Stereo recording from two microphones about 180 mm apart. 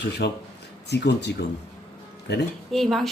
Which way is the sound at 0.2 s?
70° left (ahead or behind).